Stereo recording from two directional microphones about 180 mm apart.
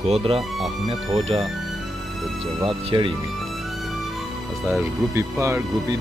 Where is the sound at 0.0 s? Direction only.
35° right (ahead or behind).